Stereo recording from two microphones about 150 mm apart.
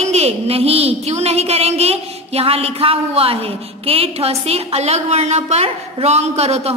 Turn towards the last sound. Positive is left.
turn(degrees=-45)  # may be behind; listen again after turning